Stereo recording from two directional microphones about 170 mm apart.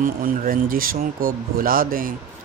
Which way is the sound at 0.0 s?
55° right (ahead or behind).